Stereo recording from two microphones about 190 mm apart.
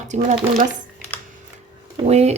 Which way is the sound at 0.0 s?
40° right (ahead or behind).